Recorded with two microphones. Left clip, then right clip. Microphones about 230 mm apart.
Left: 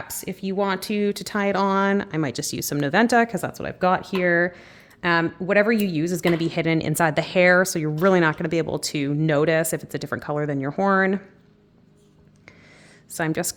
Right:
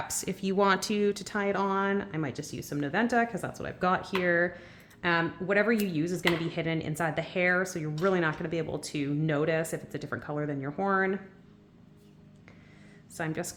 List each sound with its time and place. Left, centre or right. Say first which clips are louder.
0.1 s speech: left 2 dB; centre; by 11.2 s left
13.1 s speech: left 9 dB; left